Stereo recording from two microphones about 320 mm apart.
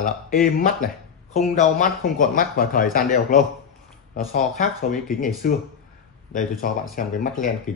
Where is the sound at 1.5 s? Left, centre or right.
Left.